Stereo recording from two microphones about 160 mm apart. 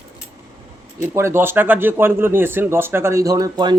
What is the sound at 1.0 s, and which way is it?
Speech, 15° right (ahead or behind).